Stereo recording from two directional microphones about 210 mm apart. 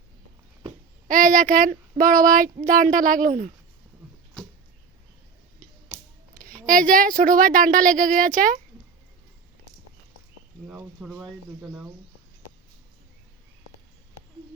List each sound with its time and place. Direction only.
1.0 s speech: 40° right (ahead or behind)
6.7 s speech: 40° right (ahead or behind)
10.7 s speech: 5° right (ahead or behind)